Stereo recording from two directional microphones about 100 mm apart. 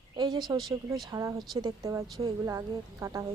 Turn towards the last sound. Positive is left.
turn(degrees=-30)  # may be behind; listen again after turning